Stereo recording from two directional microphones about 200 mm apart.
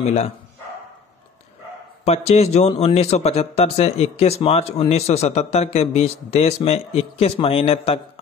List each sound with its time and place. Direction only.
0.0 s a man's voice: 30° left (ahead or behind)
2.0 s a man's voice: 30° left (ahead or behind)